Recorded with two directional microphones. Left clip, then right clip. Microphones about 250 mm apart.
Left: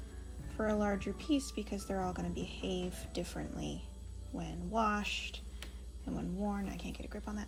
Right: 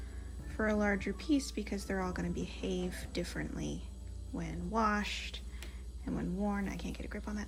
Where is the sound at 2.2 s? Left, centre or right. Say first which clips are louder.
Right 1 dB; right.